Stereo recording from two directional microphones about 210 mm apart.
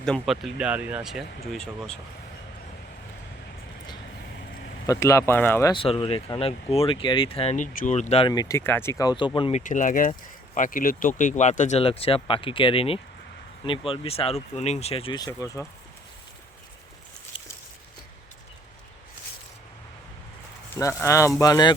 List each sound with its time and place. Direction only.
0.0 s speech: centre (ahead or behind)
4.9 s speech: 15° left (ahead or behind)
5.7 s speech: 25° left (ahead or behind)
8.3 s speech: 15° left (ahead or behind)
17.3 s a sound: 25° left (ahead or behind)
20.7 s speech: 15° left (ahead or behind)